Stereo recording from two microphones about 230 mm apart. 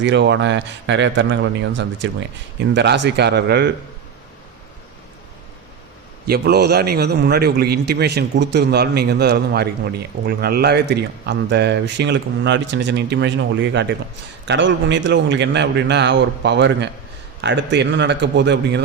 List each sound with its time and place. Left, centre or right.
0.0 s a man's voice: right
6.2 s a man's voice: right